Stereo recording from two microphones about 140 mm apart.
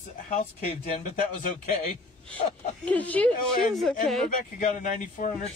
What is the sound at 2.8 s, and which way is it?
Speech, 10° left (ahead or behind).